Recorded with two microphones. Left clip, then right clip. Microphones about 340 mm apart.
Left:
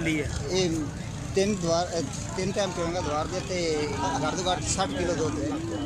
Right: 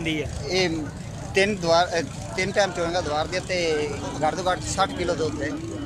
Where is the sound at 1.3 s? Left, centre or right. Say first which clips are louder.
Right 6 dB; right.